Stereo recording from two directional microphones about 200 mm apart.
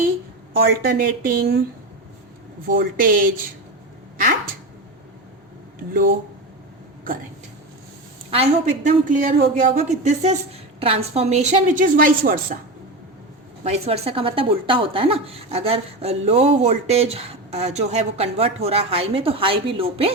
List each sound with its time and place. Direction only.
0.6 s speech: 50° right (ahead or behind)
2.6 s speech: 45° right (ahead or behind)
8.3 s speech: 30° right (ahead or behind)
13.7 s speech: 30° right (ahead or behind)